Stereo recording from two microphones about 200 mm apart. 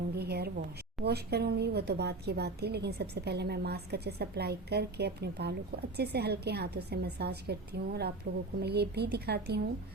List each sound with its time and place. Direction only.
0.2 s a woman's voice: 55° right (ahead or behind)